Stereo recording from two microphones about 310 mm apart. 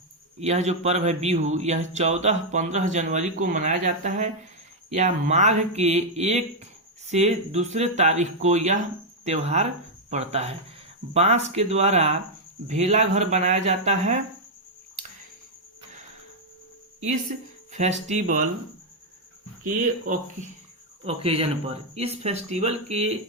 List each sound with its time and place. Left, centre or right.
0.3 s speech: right
17.7 s speech: right
20.1 s speech: right